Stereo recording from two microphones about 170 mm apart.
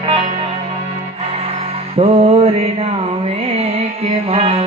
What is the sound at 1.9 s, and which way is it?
Music, 35° right (ahead or behind).